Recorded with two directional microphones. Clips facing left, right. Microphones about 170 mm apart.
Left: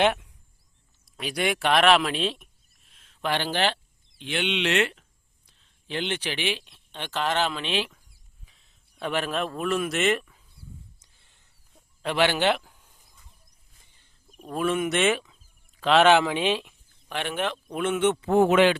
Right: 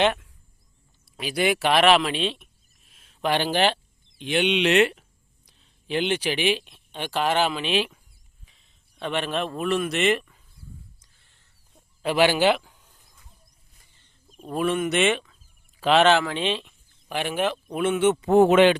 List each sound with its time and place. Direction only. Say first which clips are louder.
0.0 s speech: even; 10° left (ahead or behind)
1.0 s speech: right 3 dB; centre (ahead or behind)
2.9 s speech: right 4 dB; 10° right (ahead or behind)
8.4 s speech: even; centre (ahead or behind)
11.2 s a sound: even; 15° left (ahead or behind)
11.7 s a sound: right 4 dB; 5° right (ahead or behind)
14.4 s speech: right 1 dB; centre (ahead or behind)
16.0 s speech: left 1 dB; 15° left (ahead or behind)
17.1 s speech: right 3 dB; 10° right (ahead or behind)
18.2 s speech: right 4 dB; 20° right (ahead or behind)